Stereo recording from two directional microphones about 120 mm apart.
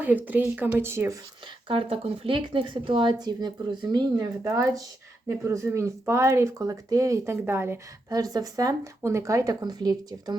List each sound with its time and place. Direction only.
0.0 s speech: 15° right (ahead or behind)
1.6 s speech: 50° right (ahead or behind); by 7.8 s 20° right (ahead or behind)
8.1 s speech: 30° right (ahead or behind)